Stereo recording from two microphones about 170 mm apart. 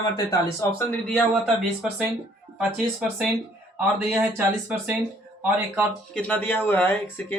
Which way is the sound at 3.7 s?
10° right (ahead or behind).